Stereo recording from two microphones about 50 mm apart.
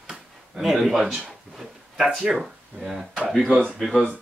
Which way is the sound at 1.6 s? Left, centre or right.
Centre.